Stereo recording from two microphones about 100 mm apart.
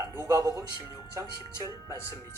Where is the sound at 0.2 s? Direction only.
40° right (ahead or behind).